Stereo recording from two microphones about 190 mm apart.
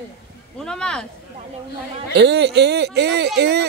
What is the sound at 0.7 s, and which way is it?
Speech, 5° left (ahead or behind).